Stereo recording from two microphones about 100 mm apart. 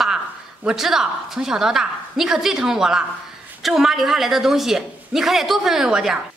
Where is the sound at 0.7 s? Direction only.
5° right (ahead or behind).